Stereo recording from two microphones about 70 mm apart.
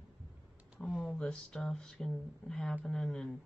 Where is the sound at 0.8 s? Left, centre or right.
Centre.